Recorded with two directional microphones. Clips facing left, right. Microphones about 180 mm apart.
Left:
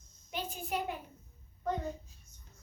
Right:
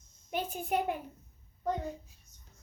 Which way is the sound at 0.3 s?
55° right (ahead or behind).